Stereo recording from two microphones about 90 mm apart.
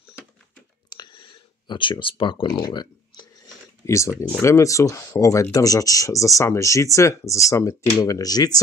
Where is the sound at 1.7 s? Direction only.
65° left (ahead or behind).